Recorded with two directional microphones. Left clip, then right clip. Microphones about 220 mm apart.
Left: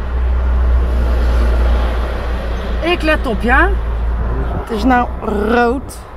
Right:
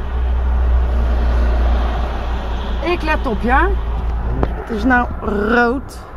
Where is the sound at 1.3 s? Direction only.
55° left (ahead or behind).